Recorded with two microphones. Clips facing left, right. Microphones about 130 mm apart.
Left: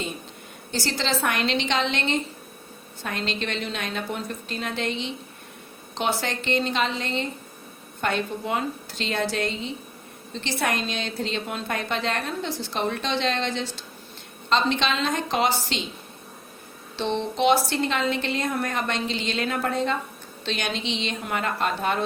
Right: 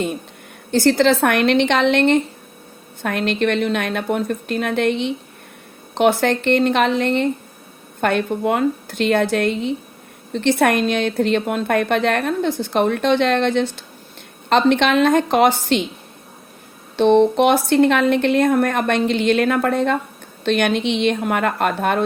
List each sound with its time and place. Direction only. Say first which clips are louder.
0.7 s a woman's voice: right 12 dB; 55° right (ahead or behind)
17.0 s a woman's voice: right 11 dB; 55° right (ahead or behind)